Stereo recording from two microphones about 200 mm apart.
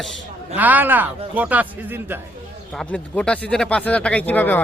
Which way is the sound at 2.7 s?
5° left (ahead or behind).